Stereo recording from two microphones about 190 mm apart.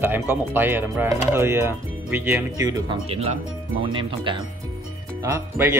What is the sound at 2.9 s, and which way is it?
Speech, 30° right (ahead or behind).